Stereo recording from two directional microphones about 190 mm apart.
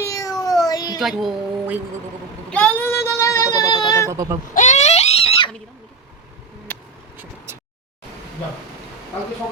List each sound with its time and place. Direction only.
0.0 s meow: 15° left (ahead or behind)
0.7 s a sound: 20° left (ahead or behind)
0.9 s speech: centre (ahead or behind)
2.5 s speech: 10° left (ahead or behind)
4.1 s speech: 15° right (ahead or behind)
4.5 s a sound: 40° left (ahead or behind)
7.5 s vehicle: 15° right (ahead or behind)